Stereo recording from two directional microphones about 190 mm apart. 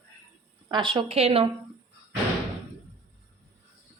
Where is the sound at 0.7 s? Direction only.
25° right (ahead or behind).